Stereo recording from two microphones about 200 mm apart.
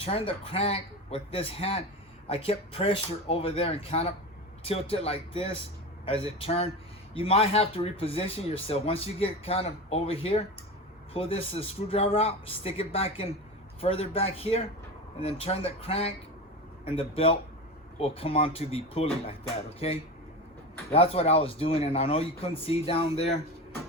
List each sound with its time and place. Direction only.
0.0 s speech: 30° left (ahead or behind)